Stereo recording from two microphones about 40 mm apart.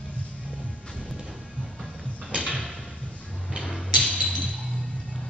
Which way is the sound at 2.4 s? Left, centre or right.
Left.